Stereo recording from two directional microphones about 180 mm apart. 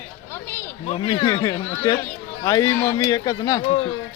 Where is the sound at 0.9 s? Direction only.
30° left (ahead or behind).